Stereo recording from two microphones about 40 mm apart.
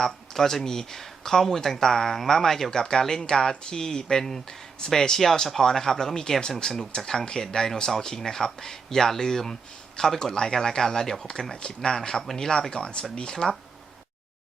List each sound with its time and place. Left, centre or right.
0.0 s speech: centre